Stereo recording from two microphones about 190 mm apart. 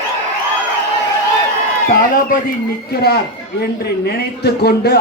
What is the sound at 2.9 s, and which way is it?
A man's voice, 55° left (ahead or behind).